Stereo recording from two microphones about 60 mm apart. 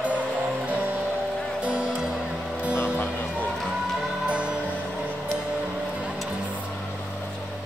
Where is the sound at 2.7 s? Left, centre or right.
Left.